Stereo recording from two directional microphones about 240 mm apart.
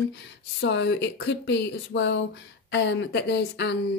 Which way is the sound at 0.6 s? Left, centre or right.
Left.